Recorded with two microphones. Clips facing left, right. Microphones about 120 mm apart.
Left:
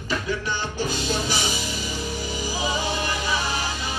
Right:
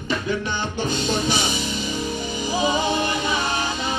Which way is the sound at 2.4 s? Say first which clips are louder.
Right 6 dB; 20° right (ahead or behind).